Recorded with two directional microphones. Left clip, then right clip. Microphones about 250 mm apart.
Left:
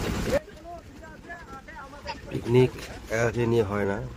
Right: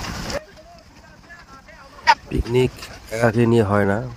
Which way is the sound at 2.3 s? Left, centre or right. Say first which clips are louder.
Right 3 dB; right.